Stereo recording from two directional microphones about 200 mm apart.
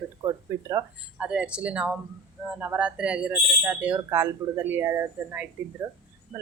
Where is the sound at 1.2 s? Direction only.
5° right (ahead or behind).